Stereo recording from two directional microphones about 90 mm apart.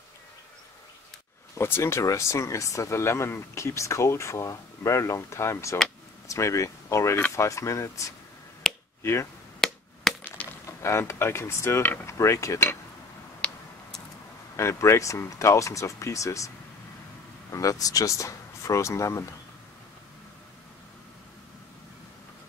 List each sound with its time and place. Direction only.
1.6 s speech: 30° left (ahead or behind)
8.6 s finger snapping: 5° left (ahead or behind)
9.0 s speech: 30° left (ahead or behind)
9.6 s chop: 5° left (ahead or behind)
10.8 s speech: 30° left (ahead or behind)
13.4 s a sound: 10° left (ahead or behind)
14.6 s speech: 35° left (ahead or behind)